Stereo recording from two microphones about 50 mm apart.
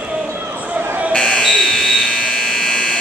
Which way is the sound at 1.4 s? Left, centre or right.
Centre.